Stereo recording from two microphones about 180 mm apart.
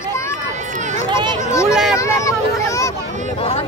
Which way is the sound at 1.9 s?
15° left (ahead or behind).